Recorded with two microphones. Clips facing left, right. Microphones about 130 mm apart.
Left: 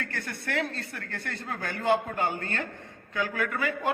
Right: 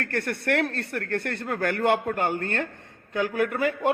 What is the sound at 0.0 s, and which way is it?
A man's voice, 65° right (ahead or behind).